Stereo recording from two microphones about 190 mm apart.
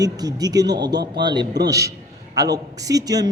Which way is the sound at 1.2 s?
25° right (ahead or behind).